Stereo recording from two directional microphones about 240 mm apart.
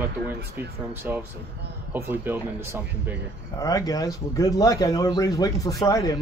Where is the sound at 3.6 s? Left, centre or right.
Centre.